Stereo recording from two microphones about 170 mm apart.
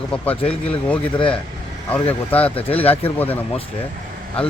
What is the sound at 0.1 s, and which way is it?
Speech, 5° left (ahead or behind).